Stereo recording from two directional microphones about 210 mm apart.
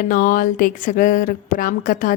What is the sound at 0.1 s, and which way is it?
A woman's voice, 40° left (ahead or behind).